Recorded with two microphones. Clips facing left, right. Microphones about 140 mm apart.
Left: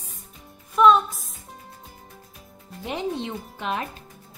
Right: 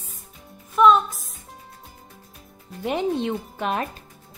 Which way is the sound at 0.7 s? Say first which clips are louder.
Even; centre (ahead or behind).